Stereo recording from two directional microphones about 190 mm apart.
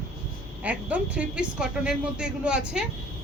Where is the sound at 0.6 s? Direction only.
5° right (ahead or behind).